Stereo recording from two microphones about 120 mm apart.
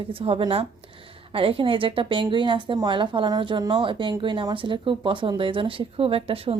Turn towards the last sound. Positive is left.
turn(degrees=-50)  # may be behind; listen again after turning